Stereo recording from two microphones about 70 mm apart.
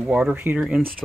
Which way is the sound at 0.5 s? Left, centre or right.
Centre.